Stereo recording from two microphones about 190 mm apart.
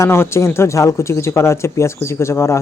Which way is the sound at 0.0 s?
15° left (ahead or behind).